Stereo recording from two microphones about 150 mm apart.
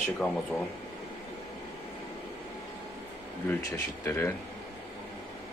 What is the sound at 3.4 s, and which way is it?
Speech, 15° left (ahead or behind).